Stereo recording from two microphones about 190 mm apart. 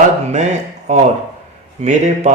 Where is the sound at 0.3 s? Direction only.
35° right (ahead or behind).